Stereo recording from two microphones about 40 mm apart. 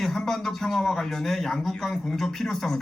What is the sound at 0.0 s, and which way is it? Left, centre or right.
Speech, centre.